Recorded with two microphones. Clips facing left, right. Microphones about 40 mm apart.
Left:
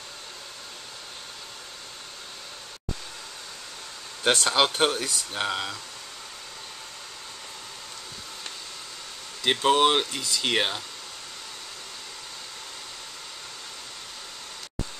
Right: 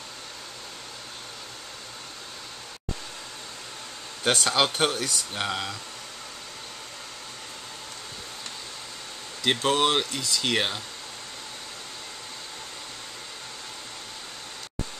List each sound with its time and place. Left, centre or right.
4.3 s speech: centre
9.4 s speech: centre